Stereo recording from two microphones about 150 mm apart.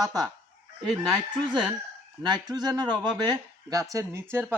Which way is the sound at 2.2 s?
25° right (ahead or behind).